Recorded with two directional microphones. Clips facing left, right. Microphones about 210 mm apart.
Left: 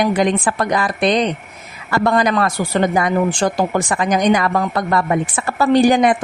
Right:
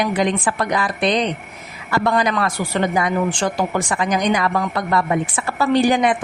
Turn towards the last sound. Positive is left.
turn(degrees=40)  # may be behind; listen again after turning